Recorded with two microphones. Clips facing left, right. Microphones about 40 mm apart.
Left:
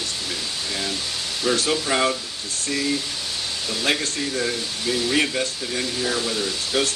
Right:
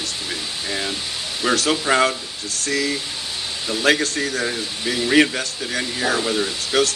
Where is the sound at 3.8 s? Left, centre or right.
Right.